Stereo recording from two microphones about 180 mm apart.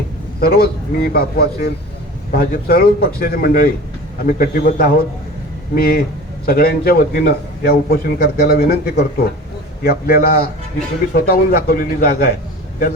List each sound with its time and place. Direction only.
0.3 s a man's voice: 55° left (ahead or behind)